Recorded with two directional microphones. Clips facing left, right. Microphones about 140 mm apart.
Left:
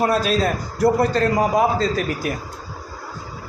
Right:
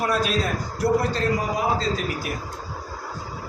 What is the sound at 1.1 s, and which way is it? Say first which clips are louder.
Speech: left 6 dB; 50° left (ahead or behind).